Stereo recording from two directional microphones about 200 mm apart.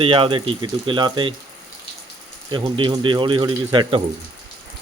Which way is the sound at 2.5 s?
25° right (ahead or behind).